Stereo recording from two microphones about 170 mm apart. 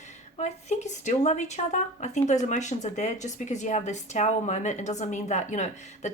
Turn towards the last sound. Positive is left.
turn(degrees=45)  # may be behind; listen again after turning